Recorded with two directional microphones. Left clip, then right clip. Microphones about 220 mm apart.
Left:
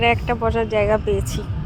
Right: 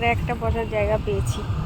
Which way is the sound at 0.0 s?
25° left (ahead or behind).